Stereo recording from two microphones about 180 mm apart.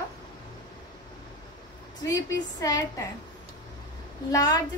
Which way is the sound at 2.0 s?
20° left (ahead or behind).